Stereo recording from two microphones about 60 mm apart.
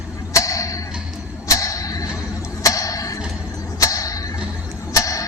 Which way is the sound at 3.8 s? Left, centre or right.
Left.